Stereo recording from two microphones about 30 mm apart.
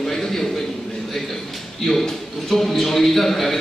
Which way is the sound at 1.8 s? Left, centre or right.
Centre.